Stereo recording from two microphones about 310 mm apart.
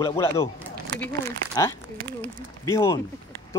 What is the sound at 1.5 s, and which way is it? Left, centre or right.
Speech, centre.